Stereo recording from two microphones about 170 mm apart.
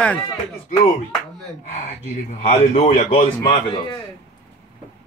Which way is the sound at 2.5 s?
35° left (ahead or behind).